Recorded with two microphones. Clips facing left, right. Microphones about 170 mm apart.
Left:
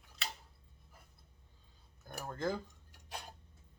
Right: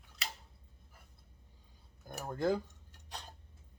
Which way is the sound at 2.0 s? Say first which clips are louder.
Right 4 dB; 10° right (ahead or behind).